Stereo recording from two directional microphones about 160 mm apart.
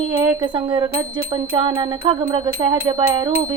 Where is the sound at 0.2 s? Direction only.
30° right (ahead or behind).